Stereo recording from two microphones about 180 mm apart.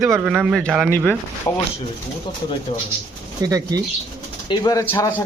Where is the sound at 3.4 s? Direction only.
20° right (ahead or behind).